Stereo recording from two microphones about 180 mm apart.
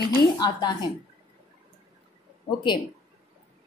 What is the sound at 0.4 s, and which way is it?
Speech, 25° left (ahead or behind).